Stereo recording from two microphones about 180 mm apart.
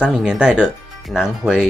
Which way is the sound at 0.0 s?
5° right (ahead or behind).